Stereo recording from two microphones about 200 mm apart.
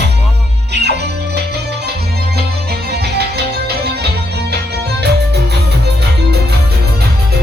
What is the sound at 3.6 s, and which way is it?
Music, 55° right (ahead or behind).